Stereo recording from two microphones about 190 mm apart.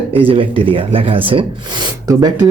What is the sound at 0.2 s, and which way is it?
Speech, 30° right (ahead or behind).